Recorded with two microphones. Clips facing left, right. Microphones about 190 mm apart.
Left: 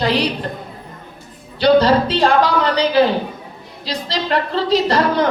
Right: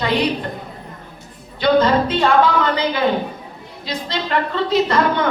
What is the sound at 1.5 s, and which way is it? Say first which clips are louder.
A woman's voice: left 2 dB; 35° left (ahead or behind).